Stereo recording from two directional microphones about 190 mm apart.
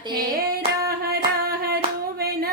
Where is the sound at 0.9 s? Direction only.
55° right (ahead or behind).